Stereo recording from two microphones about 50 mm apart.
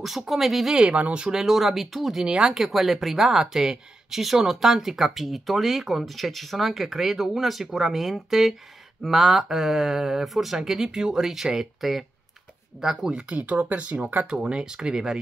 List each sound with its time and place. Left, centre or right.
0.0 s speech: centre
0.7 s speech: centre
13.1 s speech: right
14.2 s speech: centre